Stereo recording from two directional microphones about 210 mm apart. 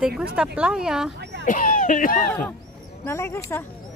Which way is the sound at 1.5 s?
40° left (ahead or behind).